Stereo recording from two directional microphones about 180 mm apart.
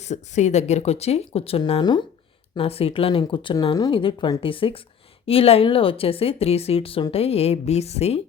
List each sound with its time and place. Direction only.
0.0 s a woman's voice: 40° left (ahead or behind)